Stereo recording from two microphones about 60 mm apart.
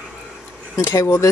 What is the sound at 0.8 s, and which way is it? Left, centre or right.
Speech, left.